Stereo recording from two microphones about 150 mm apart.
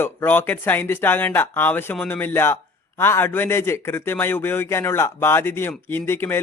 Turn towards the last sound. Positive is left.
turn(degrees=15)  # may be behind; listen again after turning